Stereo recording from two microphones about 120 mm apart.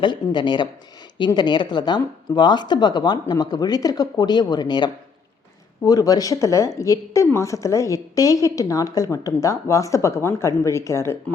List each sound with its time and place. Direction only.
0.0 s a woman's voice: 40° left (ahead or behind); by 11.2 s 25° left (ahead or behind)